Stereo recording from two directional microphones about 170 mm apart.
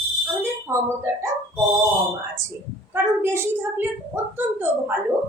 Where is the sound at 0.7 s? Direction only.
15° right (ahead or behind).